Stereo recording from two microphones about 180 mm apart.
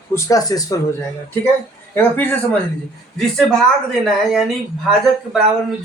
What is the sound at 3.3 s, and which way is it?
Speech, centre (ahead or behind).